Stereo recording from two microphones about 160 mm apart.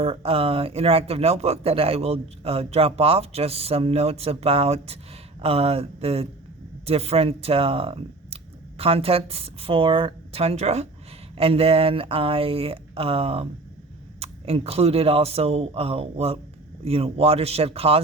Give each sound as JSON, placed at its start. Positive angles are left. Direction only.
{"t": 0.0, "sound": "speech", "side_deg": -35}